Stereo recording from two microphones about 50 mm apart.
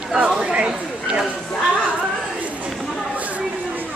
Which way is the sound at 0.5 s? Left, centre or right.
Right.